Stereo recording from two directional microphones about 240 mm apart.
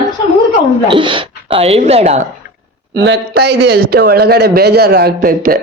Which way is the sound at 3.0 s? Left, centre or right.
Right.